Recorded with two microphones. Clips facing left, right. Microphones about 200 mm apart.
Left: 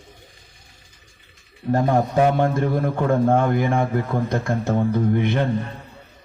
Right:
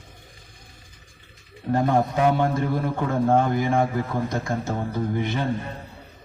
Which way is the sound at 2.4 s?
50° left (ahead or behind).